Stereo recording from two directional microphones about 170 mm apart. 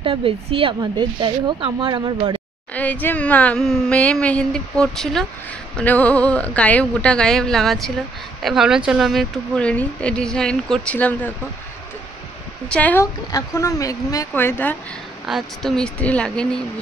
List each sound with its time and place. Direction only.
0.0 s speech: 30° right (ahead or behind)
2.7 s a woman's voice: 10° left (ahead or behind)
12.6 s a woman's voice: 10° left (ahead or behind)
15.2 s speech: centre (ahead or behind)